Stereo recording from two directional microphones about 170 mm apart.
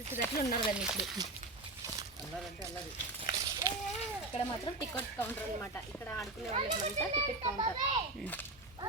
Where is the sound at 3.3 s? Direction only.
20° right (ahead or behind).